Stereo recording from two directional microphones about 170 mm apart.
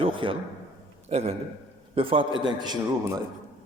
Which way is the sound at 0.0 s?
30° right (ahead or behind).